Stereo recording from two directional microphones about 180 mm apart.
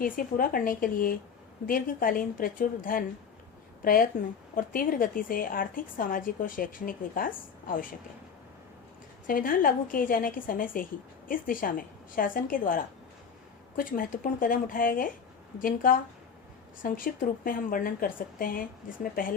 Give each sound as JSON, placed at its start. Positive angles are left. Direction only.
{"t": 0.0, "sound": "a woman's voice", "side_deg": 50}
{"t": 9.2, "sound": "a woman's voice", "side_deg": 50}